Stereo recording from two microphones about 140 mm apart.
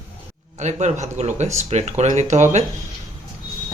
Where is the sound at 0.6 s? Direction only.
55° right (ahead or behind).